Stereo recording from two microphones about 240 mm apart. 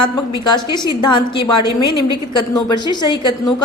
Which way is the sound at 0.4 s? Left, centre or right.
Centre.